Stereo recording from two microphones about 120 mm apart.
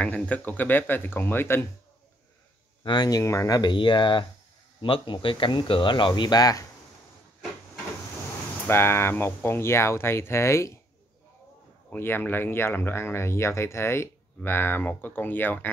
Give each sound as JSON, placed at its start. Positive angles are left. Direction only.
{"t": 0.0, "sound": "speech", "side_deg": 10}
{"t": 2.8, "sound": "speech", "side_deg": 40}
{"t": 8.6, "sound": "speech", "side_deg": 20}
{"t": 11.9, "sound": "speech", "side_deg": 20}